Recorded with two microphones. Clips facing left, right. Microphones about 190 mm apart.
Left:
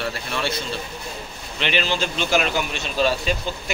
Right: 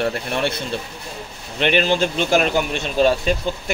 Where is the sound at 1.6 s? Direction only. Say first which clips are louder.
Right 6 dB; 55° right (ahead or behind).